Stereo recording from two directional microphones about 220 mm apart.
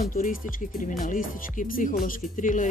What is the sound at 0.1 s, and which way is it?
Speech, 40° left (ahead or behind).